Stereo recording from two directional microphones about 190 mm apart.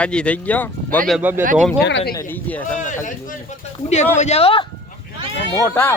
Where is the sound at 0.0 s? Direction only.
5° left (ahead or behind).